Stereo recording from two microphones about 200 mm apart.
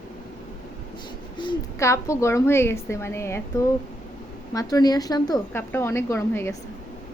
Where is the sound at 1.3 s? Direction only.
20° left (ahead or behind).